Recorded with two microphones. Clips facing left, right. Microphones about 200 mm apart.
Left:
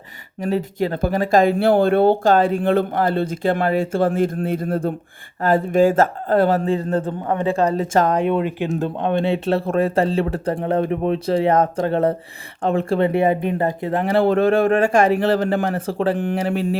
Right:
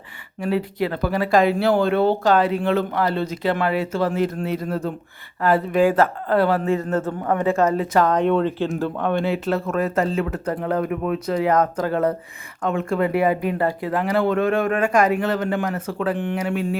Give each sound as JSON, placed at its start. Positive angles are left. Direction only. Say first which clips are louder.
{"t": 0.3, "sound": "speech", "louder": "left 1 dB", "side_deg": 45}
{"t": 6.7, "sound": "speech", "louder": "left 1 dB", "side_deg": 30}
{"t": 7.0, "sound": "speech", "louder": "even", "side_deg": 20}
{"t": 8.0, "sound": "speech", "louder": "even", "side_deg": 10}